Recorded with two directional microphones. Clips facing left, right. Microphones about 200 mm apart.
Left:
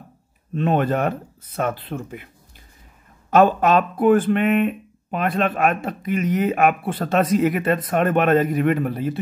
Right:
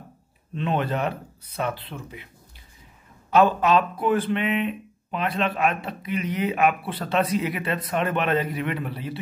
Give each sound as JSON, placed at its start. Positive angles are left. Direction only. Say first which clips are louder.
{"t": 0.6, "sound": "speech", "louder": "left 5 dB", "side_deg": 50}
{"t": 3.3, "sound": "speech", "louder": "left 3 dB", "side_deg": 50}